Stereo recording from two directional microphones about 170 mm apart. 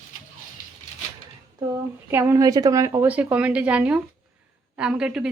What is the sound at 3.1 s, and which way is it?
Speech, 10° right (ahead or behind).